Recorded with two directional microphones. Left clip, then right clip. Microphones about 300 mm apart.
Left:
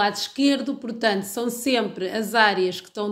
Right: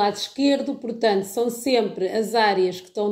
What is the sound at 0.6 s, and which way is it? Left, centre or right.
A woman's voice, left.